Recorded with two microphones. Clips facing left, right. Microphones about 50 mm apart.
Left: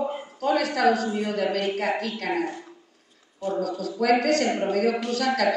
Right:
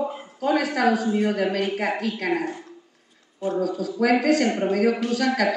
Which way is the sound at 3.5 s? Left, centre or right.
Centre.